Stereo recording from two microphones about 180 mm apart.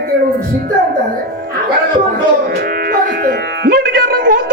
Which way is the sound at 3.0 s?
55° right (ahead or behind).